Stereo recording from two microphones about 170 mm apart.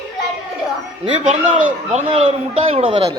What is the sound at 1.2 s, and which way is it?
A man's voice, 45° right (ahead or behind).